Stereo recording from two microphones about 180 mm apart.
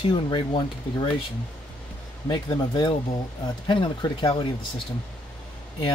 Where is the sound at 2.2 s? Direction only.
25° left (ahead or behind).